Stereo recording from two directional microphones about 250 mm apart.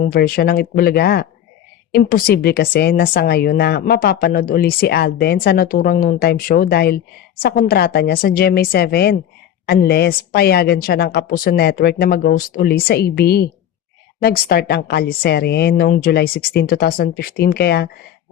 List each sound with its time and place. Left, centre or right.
0.0 s speech: left